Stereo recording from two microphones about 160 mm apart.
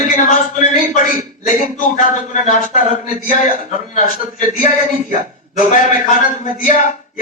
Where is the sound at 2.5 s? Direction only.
50° left (ahead or behind).